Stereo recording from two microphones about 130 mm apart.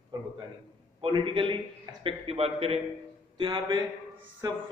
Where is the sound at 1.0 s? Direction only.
40° right (ahead or behind).